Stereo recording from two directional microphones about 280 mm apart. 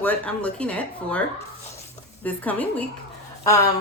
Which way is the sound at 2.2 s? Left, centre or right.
Centre.